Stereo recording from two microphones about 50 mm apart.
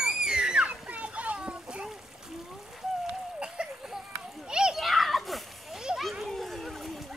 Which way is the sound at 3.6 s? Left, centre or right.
Centre.